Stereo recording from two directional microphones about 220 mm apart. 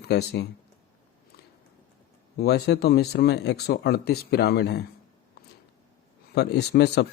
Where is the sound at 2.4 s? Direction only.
50° left (ahead or behind).